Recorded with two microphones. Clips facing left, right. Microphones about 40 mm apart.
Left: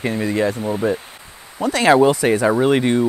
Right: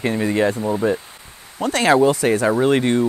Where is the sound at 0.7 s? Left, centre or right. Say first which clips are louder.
Right 1 dB; centre.